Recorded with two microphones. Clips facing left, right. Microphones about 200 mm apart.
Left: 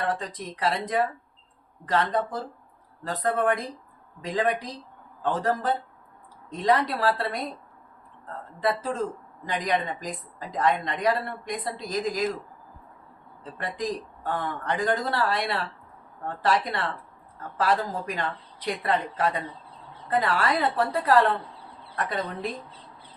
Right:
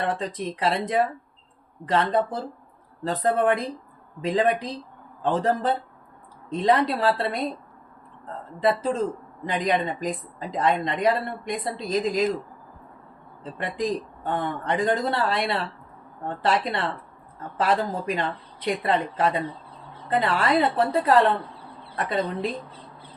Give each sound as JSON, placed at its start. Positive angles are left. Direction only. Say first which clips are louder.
{"t": 0.0, "sound": "a woman's voice", "louder": "right 3 dB", "side_deg": -25}
{"t": 13.4, "sound": "a woman's voice", "louder": "right 4 dB", "side_deg": -25}